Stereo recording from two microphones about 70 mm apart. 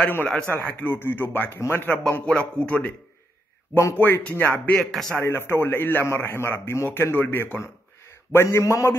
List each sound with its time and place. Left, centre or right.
0.0 s a man's voice: left
1.9 s speech: left
3.9 s speech: left
4.7 s a man's voice: centre
5.2 s a man's voice: left
8.3 s a man's voice: left